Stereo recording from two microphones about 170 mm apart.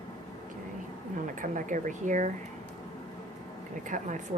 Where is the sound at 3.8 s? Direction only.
50° right (ahead or behind).